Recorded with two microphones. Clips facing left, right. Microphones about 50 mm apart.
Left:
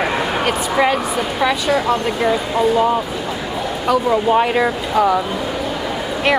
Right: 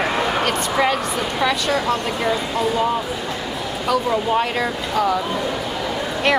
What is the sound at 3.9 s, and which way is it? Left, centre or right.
Speech, centre.